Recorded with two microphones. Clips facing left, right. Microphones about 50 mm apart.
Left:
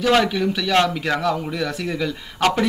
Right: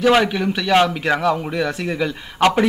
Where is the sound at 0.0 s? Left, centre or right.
Centre.